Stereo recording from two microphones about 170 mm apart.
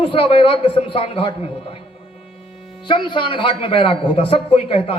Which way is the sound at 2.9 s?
30° left (ahead or behind).